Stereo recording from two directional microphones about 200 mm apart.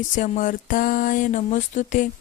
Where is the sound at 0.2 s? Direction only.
40° left (ahead or behind).